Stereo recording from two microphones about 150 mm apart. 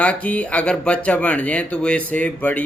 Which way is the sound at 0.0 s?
10° left (ahead or behind).